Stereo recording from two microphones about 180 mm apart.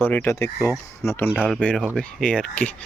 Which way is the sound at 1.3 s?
5° right (ahead or behind).